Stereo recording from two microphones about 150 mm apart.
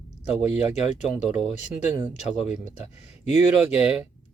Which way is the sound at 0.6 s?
45° left (ahead or behind).